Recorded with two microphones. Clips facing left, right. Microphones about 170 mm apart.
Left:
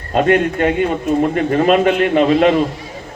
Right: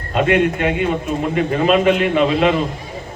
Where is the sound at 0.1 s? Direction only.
45° left (ahead or behind).